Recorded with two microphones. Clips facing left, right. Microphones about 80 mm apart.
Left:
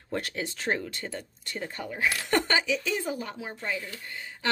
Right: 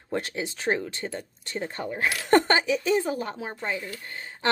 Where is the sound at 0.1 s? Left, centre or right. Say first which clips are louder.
Right 2 dB; right.